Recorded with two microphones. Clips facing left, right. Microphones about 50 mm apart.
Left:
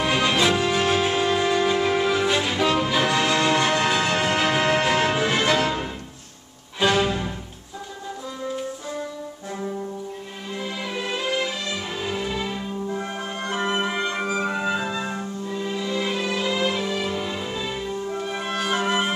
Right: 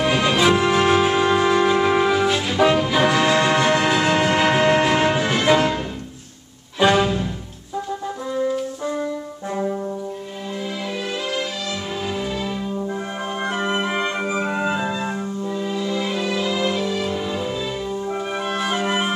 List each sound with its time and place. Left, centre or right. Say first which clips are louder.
0.0 s music: right 3 dB; centre
2.1 s brass instrument: right 2 dB; centre
3.0 s music: right 4 dB; centre
6.8 s music: right 4 dB; centre
11.0 s music: left 2 dB; centre
12.9 s music: right 2 dB; centre
18.0 s music: right 3 dB; centre